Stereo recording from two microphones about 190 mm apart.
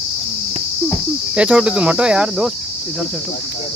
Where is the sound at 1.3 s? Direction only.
5° right (ahead or behind).